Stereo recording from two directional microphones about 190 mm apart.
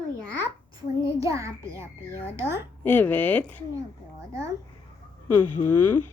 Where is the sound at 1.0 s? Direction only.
15° right (ahead or behind).